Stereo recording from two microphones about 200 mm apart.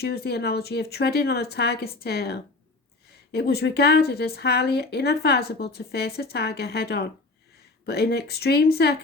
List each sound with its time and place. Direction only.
0.0 s speech: 50° left (ahead or behind)